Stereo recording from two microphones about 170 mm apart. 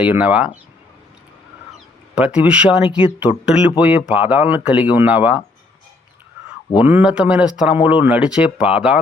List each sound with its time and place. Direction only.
0.0 s speech: 10° right (ahead or behind)
2.1 s speech: 5° right (ahead or behind)
6.7 s speech: 10° right (ahead or behind)